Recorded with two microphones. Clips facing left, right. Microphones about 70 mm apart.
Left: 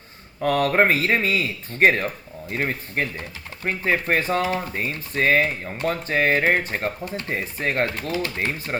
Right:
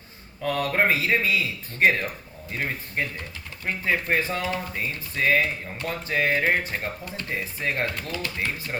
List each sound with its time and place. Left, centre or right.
0.4 s speech: left